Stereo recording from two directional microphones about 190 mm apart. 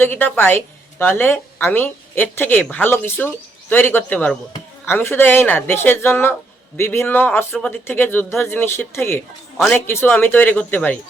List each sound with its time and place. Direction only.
0.0 s a woman's voice: 10° left (ahead or behind)
9.6 s speech: centre (ahead or behind)
9.8 s a woman's voice: 10° left (ahead or behind)